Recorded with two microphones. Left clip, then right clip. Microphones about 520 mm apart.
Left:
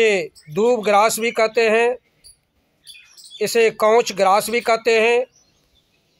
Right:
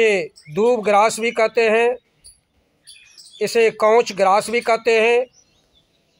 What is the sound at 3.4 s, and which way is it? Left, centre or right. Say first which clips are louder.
Speech: even; left.